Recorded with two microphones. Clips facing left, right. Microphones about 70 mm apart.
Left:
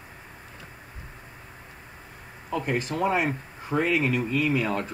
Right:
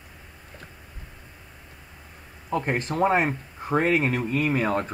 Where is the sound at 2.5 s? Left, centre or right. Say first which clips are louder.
Right 2 dB; right.